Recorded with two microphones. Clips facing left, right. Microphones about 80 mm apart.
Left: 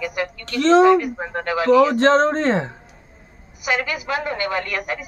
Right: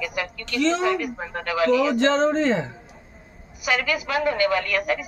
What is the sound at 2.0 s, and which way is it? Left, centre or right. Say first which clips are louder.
Speech: left 3 dB; left.